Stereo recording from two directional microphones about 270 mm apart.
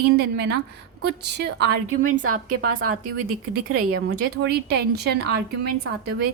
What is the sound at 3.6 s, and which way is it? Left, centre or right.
Speech, right.